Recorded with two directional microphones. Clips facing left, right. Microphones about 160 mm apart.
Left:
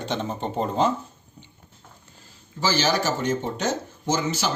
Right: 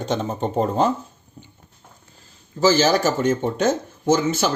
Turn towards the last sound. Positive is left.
turn(degrees=-50)  # may be behind; listen again after turning